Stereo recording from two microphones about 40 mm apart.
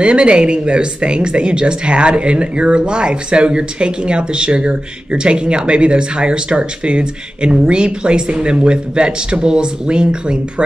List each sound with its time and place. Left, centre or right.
0.0 s speech: right